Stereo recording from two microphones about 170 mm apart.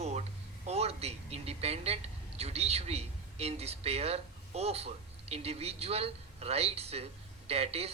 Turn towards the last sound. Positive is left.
turn(degrees=-35)  # may be behind; listen again after turning